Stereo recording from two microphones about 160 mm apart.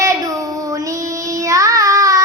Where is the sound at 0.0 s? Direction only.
20° right (ahead or behind).